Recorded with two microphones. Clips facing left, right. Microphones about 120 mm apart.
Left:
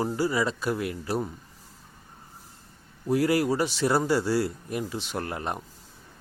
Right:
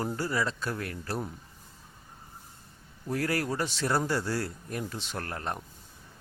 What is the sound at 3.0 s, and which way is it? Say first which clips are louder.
Speech: left 7 dB; 10° left (ahead or behind).